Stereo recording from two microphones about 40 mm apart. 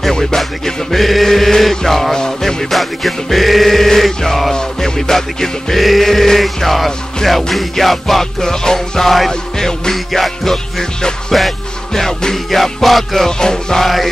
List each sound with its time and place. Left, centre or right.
0.1 s music: centre
0.4 s music: centre
12.4 s music: centre
13.4 s music: centre
13.8 s music: centre